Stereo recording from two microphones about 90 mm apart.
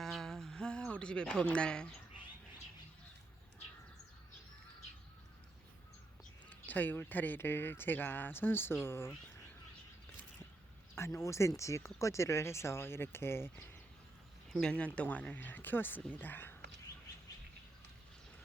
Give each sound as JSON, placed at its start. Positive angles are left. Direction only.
{"t": 0.0, "sound": "a sound", "side_deg": 5}
{"t": 6.5, "sound": "speech", "side_deg": 20}
{"t": 10.9, "sound": "speech", "side_deg": 30}
{"t": 14.5, "sound": "speech", "side_deg": 10}